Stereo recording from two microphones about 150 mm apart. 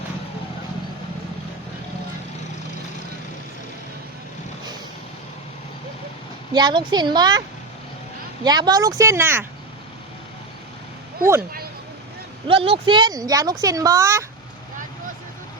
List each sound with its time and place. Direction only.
6.5 s speech: 30° right (ahead or behind)
8.4 s speech: 25° right (ahead or behind)
12.5 s speech: 35° right (ahead or behind); by 14.3 s 20° right (ahead or behind)